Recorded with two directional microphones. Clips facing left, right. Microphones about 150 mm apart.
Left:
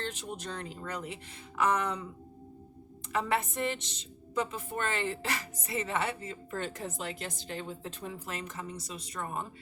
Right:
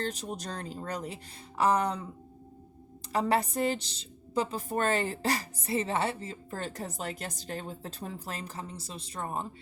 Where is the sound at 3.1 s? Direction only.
35° right (ahead or behind).